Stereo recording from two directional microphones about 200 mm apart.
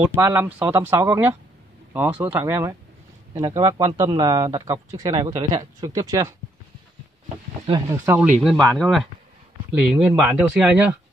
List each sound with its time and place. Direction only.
0.0 s speech: 10° right (ahead or behind)
7.6 s speech: 25° right (ahead or behind)
8.1 s speech: 5° right (ahead or behind)